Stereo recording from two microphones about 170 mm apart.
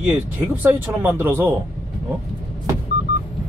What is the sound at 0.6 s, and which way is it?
Speech, 10° right (ahead or behind).